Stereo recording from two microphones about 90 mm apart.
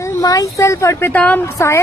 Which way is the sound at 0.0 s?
40° left (ahead or behind).